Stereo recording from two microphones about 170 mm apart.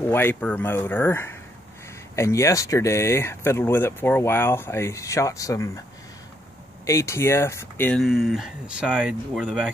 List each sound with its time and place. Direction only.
0.1 s speech: 10° left (ahead or behind)
6.9 s speech: 15° left (ahead or behind)
8.0 s speech: centre (ahead or behind)